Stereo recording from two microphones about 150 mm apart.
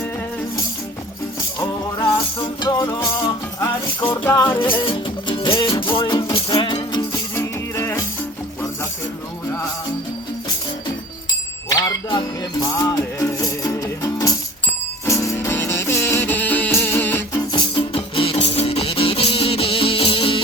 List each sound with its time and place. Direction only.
2.6 s music: 25° left (ahead or behind)
4.1 s music: 15° left (ahead or behind)
4.7 s music: 35° left (ahead or behind); by 8.0 s 20° left (ahead or behind)
11.7 s music: 25° left (ahead or behind)
17.5 s music: 30° left (ahead or behind)